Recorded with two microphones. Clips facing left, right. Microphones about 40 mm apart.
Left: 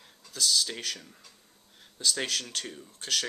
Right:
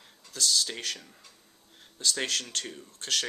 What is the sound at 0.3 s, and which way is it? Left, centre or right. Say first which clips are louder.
Speech: even; centre.